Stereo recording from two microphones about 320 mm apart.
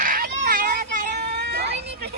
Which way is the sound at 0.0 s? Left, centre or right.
Right.